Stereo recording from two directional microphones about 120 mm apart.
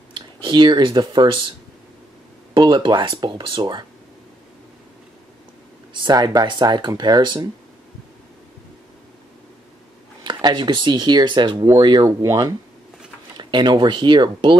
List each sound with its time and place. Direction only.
0.1 s speech: 40° right (ahead or behind)
2.5 s speech: 40° right (ahead or behind)
5.9 s speech: 35° right (ahead or behind)
10.2 s speech: 40° right (ahead or behind)
12.2 s speech: 25° right (ahead or behind)
13.4 s speech: 40° right (ahead or behind)